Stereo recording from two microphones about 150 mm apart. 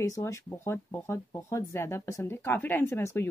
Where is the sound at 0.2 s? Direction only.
20° left (ahead or behind).